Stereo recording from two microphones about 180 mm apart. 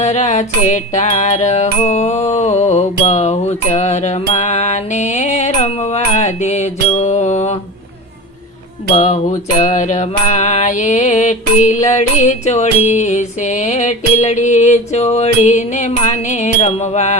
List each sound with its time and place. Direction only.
0.0 s music: 40° left (ahead or behind)
8.9 s mantra: 40° left (ahead or behind)